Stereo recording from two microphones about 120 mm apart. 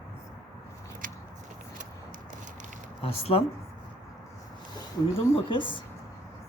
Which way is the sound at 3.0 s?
55° left (ahead or behind).